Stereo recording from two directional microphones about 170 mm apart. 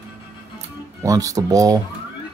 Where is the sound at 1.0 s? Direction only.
20° right (ahead or behind).